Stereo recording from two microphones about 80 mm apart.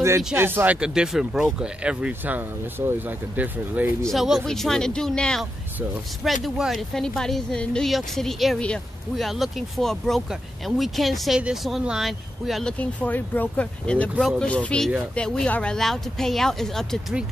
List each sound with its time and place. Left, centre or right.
0.4 s speech: right
0.7 s speech: centre
4.0 s speech: centre
6.2 s speech: centre
8.5 s speech: centre
9.1 s speech: centre
12.6 s speech: centre